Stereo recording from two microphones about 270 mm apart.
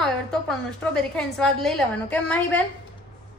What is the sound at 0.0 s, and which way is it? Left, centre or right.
A woman's voice, centre.